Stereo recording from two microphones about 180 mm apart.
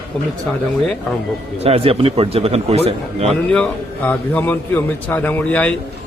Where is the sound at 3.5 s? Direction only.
5° left (ahead or behind).